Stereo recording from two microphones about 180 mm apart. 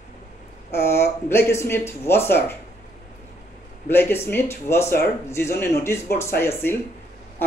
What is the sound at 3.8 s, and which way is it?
A man's voice, 10° left (ahead or behind).